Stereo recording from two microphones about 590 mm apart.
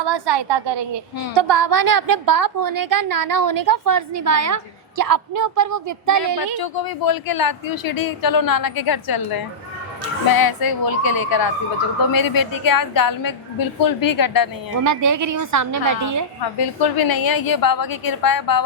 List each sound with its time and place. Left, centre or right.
0.0 s a sound: right
1.4 s a woman's voice: right
6.6 s speech: left
14.8 s a woman's voice: right
16.6 s speech: left